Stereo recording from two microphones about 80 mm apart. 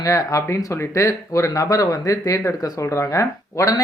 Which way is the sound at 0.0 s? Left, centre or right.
Left.